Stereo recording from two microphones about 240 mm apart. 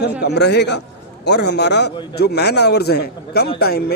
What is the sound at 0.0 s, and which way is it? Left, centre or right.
A man's voice, left.